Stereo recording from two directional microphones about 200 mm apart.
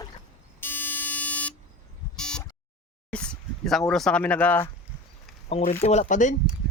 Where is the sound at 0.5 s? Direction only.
10° left (ahead or behind).